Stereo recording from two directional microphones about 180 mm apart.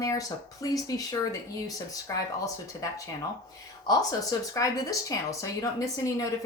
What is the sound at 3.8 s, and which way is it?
Speech, 20° left (ahead or behind).